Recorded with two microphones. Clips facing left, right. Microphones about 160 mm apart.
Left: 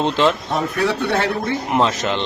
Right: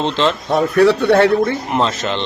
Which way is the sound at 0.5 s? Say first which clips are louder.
Right 8 dB; 50° right (ahead or behind).